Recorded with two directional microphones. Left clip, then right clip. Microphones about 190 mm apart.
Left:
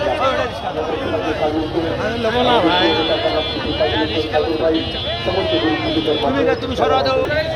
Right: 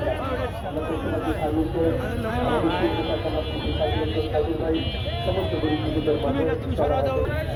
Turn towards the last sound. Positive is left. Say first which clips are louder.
# left 8 dB
turn(degrees=50)  # may be behind; listen again after turning